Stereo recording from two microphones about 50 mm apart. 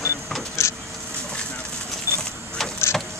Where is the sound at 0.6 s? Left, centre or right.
Left.